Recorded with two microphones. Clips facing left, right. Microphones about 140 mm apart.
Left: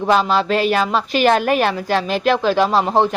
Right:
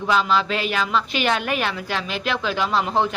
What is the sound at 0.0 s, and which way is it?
A woman's voice, 40° left (ahead or behind).